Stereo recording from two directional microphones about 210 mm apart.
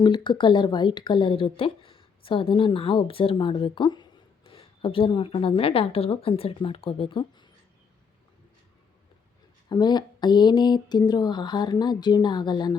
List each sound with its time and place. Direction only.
0.3 s a woman's voice: 20° left (ahead or behind)
9.6 s a woman's voice: 20° left (ahead or behind)